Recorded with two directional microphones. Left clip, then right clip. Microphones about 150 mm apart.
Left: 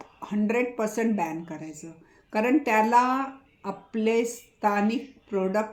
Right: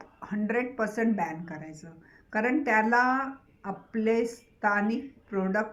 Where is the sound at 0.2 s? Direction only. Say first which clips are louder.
Left 4 dB; 25° left (ahead or behind).